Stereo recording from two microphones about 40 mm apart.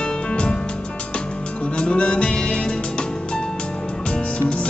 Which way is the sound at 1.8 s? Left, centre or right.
Left.